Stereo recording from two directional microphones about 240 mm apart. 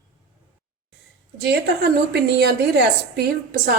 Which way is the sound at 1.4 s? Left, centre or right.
Right.